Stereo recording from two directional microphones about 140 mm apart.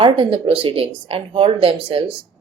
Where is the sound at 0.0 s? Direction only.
40° right (ahead or behind).